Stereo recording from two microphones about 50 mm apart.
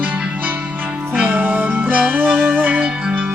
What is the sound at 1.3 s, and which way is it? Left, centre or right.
Music, right.